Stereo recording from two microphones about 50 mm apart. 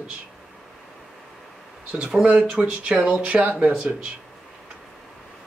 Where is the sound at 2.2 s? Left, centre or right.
Right.